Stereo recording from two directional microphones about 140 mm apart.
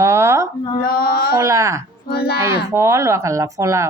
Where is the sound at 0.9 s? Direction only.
90° left.